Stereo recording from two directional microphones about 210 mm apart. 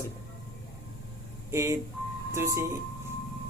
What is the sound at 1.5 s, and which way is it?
Speech, 15° right (ahead or behind).